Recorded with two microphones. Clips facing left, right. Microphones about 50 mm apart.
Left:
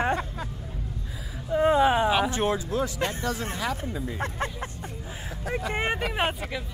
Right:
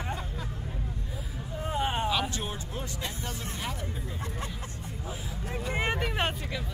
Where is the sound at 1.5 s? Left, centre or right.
Left.